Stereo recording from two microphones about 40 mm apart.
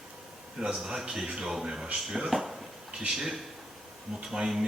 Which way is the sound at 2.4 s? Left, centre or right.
Centre.